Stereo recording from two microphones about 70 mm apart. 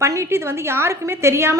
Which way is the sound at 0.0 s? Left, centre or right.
Right.